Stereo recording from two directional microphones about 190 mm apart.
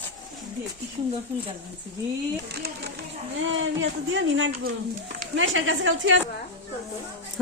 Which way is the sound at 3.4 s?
90° right.